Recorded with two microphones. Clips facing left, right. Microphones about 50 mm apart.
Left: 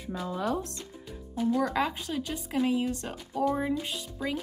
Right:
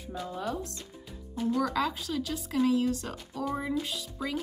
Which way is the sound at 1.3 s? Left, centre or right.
Centre.